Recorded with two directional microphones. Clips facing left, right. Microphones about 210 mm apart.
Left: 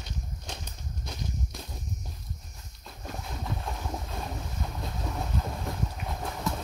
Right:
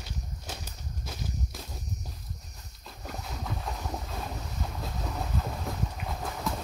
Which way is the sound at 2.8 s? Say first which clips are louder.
Left 1 dB; centre (ahead or behind).